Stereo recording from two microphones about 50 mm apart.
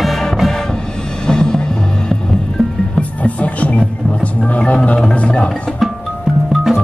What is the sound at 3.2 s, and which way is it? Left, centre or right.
Music, left.